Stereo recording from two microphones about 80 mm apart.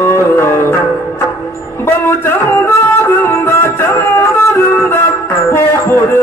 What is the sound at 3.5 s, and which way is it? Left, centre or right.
Music, left.